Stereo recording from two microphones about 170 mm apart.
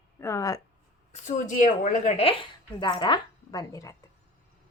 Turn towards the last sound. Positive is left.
turn(degrees=20)  # may be behind; listen again after turning